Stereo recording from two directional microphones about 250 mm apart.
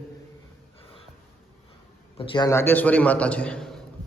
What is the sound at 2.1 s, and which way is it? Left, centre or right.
A man's voice, centre.